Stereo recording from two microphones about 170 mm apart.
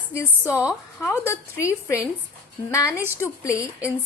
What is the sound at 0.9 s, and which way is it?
A woman's voice, 15° left (ahead or behind).